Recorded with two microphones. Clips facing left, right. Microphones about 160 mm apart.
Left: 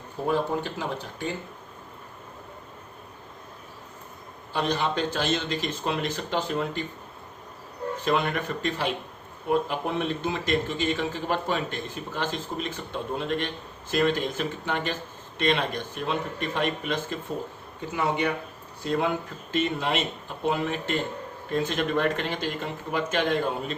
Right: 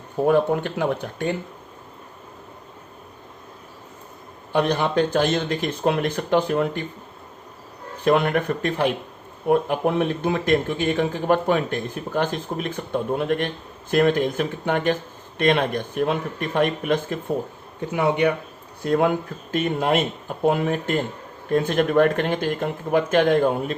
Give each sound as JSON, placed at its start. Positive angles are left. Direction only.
{"t": 0.3, "sound": "speech", "side_deg": -60}
{"t": 4.5, "sound": "speech", "side_deg": -55}
{"t": 8.0, "sound": "speech", "side_deg": -55}
{"t": 17.9, "sound": "speech", "side_deg": -60}
{"t": 18.9, "sound": "speech", "side_deg": -50}